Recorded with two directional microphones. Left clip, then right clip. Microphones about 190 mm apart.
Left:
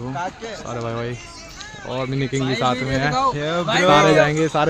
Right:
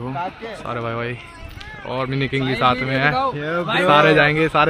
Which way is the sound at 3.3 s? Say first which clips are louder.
Left 1 dB; 35° left (ahead or behind).